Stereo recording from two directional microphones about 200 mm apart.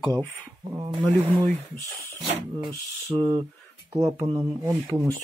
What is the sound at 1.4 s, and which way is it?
Speech, 10° left (ahead or behind).